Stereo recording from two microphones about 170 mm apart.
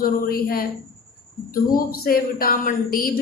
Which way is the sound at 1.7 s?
60° left (ahead or behind).